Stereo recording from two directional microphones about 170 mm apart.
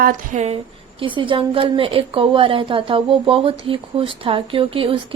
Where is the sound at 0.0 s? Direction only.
45° right (ahead or behind).